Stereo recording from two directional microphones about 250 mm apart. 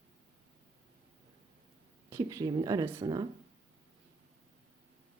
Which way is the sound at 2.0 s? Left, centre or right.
Centre.